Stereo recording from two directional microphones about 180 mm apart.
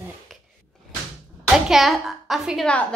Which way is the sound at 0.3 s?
Centre (ahead or behind).